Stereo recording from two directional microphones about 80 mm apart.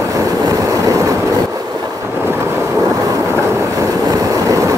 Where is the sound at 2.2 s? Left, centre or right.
Right.